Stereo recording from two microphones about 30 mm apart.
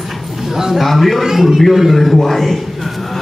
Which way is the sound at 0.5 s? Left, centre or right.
Centre.